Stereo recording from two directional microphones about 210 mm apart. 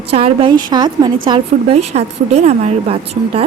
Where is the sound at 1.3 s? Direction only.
30° right (ahead or behind).